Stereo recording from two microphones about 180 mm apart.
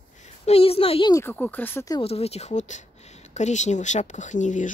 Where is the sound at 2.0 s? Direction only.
35° left (ahead or behind).